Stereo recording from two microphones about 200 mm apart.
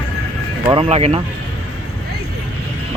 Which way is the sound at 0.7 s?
30° right (ahead or behind).